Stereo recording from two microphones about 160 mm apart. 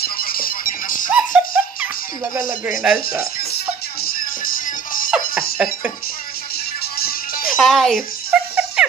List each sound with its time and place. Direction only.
0.0 s music: 65° left (ahead or behind)
1.1 s music: 10° right (ahead or behind)
2.8 s speech: 5° right (ahead or behind)
3.5 s music: 65° left (ahead or behind)
7.0 s music: 70° left (ahead or behind)
7.5 s a sound: centre (ahead or behind)